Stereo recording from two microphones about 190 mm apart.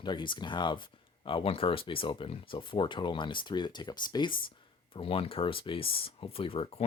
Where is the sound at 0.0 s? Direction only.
25° left (ahead or behind).